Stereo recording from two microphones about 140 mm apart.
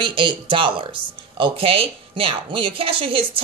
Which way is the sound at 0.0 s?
35° right (ahead or behind).